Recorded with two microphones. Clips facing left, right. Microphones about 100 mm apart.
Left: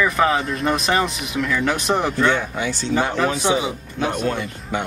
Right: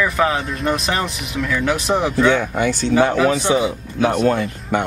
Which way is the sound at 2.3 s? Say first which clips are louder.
Right 4 dB; 55° right (ahead or behind).